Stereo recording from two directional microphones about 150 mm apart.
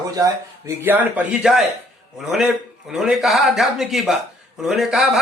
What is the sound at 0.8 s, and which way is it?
A man's voice, 10° right (ahead or behind).